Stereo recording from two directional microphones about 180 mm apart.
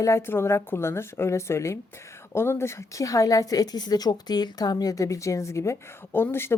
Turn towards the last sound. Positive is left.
turn(degrees=15)  # may be behind; listen again after turning